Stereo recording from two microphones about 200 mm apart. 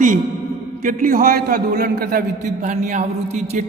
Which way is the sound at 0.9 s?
45° right (ahead or behind).